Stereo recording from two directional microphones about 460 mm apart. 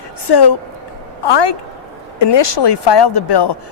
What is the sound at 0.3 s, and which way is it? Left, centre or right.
A man's voice, left.